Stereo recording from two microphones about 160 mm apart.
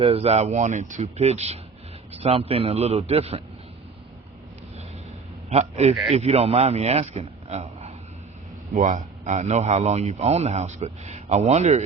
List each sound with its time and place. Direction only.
0.0 s a man's voice: 35° right (ahead or behind)
5.5 s a man's voice: 40° right (ahead or behind)